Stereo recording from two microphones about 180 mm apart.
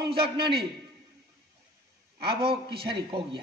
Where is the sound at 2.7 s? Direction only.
30° right (ahead or behind).